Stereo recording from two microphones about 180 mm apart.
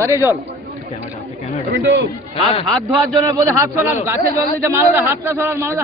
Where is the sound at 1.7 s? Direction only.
75° right (ahead or behind).